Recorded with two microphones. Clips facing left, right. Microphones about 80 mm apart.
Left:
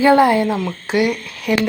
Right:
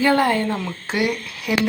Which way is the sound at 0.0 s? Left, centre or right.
Centre.